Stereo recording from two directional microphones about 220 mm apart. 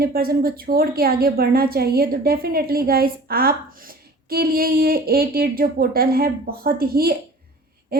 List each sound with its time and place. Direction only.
0.0 s a woman's voice: 45° right (ahead or behind)